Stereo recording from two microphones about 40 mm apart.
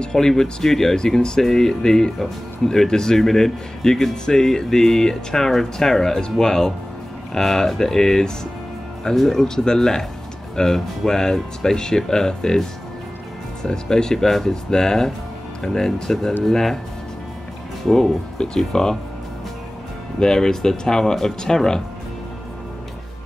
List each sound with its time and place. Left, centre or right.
0.0 s speech: centre
18.4 s speech: centre
20.2 s speech: centre